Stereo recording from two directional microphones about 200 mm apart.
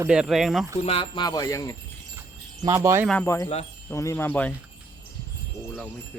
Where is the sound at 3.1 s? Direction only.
10° left (ahead or behind).